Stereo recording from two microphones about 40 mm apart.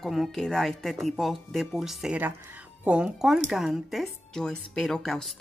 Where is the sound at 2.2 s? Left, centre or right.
Right.